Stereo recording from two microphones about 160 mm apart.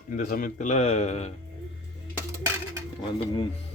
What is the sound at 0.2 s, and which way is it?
Speech, 60° left (ahead or behind).